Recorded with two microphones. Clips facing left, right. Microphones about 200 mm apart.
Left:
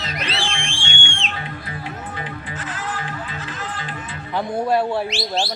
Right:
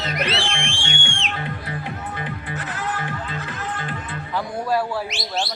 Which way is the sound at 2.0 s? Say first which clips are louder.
Right 1 dB; 60° right (ahead or behind).